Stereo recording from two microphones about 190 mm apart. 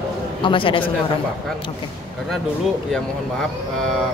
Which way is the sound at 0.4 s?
25° left (ahead or behind).